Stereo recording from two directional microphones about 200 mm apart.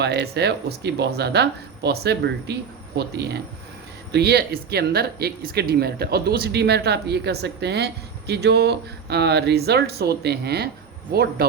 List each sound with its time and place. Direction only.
0.0 s speech: 55° right (ahead or behind)